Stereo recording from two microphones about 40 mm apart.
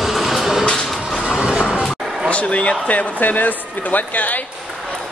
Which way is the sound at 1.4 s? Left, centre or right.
Right.